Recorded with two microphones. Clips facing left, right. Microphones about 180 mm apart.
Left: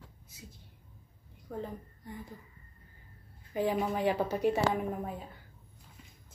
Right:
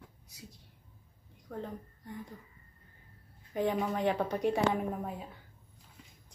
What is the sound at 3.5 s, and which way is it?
Speech, 5° left (ahead or behind).